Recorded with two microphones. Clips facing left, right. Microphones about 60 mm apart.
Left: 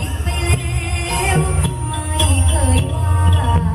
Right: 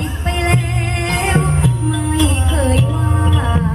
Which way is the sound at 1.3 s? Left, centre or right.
Right.